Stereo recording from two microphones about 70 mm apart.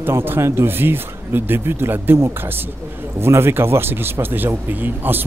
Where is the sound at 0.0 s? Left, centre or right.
Right.